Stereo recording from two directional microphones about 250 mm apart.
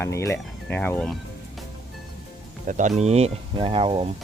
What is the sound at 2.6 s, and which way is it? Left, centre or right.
Speech, right.